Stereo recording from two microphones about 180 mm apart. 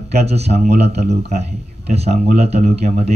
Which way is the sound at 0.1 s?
35° right (ahead or behind).